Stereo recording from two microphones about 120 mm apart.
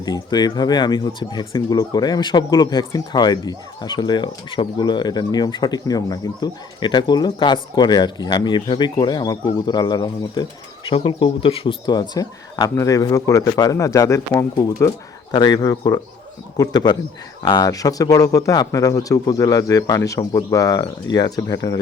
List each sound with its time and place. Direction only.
0.0 s speech: 35° left (ahead or behind)
10.8 s speech: 45° left (ahead or behind); by 21.8 s 30° left (ahead or behind)